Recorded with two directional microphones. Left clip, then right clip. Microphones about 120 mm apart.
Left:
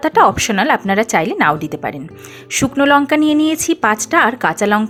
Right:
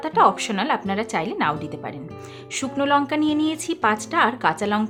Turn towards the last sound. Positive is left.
turn(degrees=45)  # may be behind; listen again after turning